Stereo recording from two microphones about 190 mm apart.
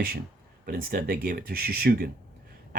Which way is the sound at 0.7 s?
50° right (ahead or behind).